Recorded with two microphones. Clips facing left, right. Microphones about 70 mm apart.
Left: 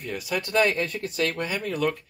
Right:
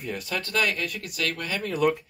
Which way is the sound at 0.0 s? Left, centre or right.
Centre.